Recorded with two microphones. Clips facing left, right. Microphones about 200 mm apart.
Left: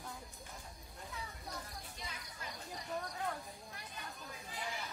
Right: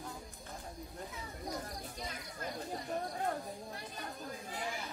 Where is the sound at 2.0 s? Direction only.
45° right (ahead or behind).